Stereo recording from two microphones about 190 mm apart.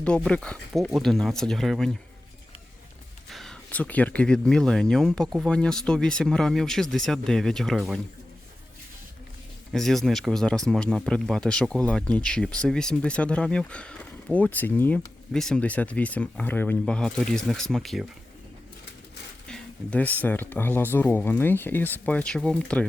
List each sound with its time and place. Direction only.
0.0 s speech: 5° left (ahead or behind)
3.2 s speech: centre (ahead or behind)
9.7 s speech: centre (ahead or behind)
19.5 s a sound: 5° left (ahead or behind)
20.2 s speech: 10° left (ahead or behind)